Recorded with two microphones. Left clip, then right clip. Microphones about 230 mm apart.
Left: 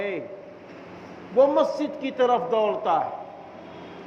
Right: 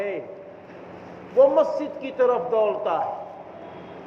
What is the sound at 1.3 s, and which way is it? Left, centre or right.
A man's voice, left.